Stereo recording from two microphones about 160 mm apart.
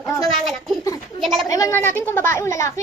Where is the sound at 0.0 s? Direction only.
20° left (ahead or behind).